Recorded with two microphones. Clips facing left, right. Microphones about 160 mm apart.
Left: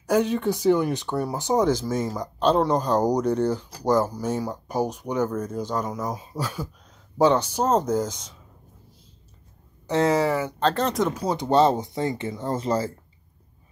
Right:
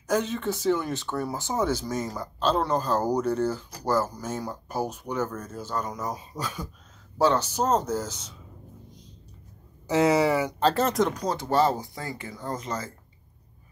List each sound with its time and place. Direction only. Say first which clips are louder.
0.0 s speech: left 5 dB; 10° left (ahead or behind)
8.1 s speech: left 2 dB; 10° right (ahead or behind)
9.8 s speech: even; 10° right (ahead or behind)
11.3 s speech: left 5 dB; 20° left (ahead or behind)